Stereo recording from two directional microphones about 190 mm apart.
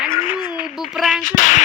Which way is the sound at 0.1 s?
45° left (ahead or behind).